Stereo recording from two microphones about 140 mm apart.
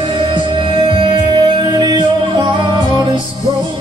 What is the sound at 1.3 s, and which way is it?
Music, 35° right (ahead or behind).